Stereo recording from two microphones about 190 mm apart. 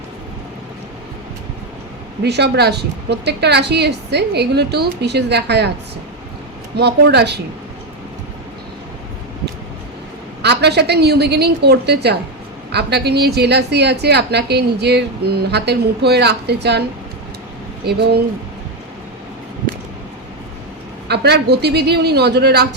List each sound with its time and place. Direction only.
2.2 s a woman's voice: 60° right (ahead or behind)
6.7 s a woman's voice: 60° right (ahead or behind)
10.4 s a woman's voice: 60° right (ahead or behind)
21.1 s a woman's voice: 60° right (ahead or behind)